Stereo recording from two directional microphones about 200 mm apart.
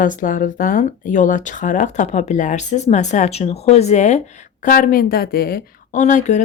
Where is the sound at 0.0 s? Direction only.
40° left (ahead or behind).